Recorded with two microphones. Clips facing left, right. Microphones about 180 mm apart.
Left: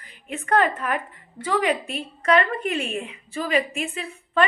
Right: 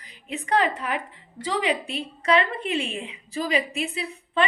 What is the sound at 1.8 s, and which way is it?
Speech, 35° right (ahead or behind).